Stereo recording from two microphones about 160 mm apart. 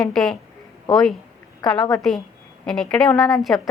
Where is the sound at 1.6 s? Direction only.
25° left (ahead or behind).